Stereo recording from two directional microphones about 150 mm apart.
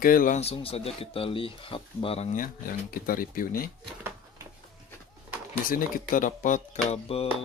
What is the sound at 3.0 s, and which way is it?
Speech, 70° left (ahead or behind).